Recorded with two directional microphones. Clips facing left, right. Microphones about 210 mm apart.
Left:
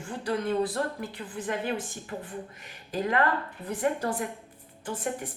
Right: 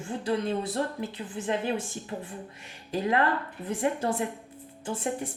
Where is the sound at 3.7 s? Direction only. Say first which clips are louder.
Right 1 dB; 25° right (ahead or behind).